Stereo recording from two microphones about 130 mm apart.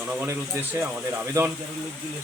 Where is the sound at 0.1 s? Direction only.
15° right (ahead or behind).